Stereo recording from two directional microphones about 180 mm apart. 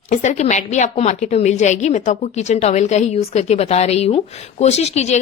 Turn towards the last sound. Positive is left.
turn(degrees=40)  # may be behind; listen again after turning